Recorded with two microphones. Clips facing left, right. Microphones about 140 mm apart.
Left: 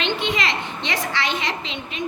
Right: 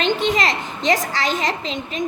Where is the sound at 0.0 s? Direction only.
40° right (ahead or behind).